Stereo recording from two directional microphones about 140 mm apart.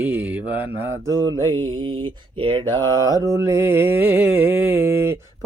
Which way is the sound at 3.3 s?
20° right (ahead or behind).